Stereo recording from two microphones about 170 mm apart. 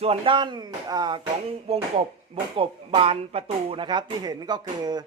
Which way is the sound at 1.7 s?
35° right (ahead or behind).